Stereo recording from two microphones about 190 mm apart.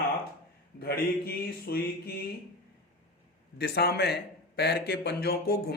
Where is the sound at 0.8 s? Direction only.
55° left (ahead or behind).